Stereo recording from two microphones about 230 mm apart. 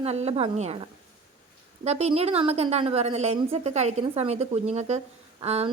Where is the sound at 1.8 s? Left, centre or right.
Right.